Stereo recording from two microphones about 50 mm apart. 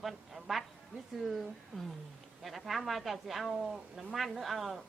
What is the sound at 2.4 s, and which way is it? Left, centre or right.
Speech, centre.